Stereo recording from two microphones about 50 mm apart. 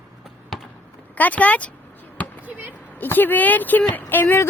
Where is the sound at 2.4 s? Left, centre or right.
Right.